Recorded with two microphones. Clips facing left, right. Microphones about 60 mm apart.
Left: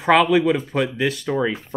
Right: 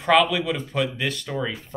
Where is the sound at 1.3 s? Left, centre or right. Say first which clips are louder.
Left 6 dB; left.